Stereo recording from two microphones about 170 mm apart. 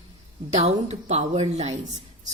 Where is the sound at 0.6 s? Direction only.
40° right (ahead or behind).